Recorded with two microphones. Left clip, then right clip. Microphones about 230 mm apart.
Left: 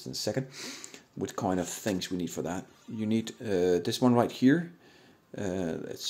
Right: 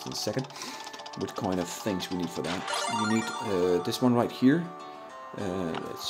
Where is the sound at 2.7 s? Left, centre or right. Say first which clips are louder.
Right 18 dB; right.